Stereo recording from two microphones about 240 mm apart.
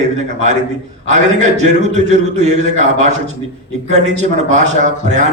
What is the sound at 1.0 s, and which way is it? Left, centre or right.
A man's voice, right.